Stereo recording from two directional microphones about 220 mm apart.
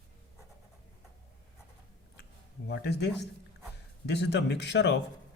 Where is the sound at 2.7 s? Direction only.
50° left (ahead or behind).